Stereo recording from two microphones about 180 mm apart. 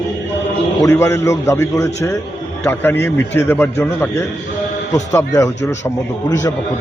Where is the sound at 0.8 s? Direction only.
15° left (ahead or behind).